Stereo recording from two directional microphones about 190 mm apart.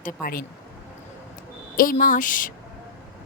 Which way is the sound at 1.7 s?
50° left (ahead or behind).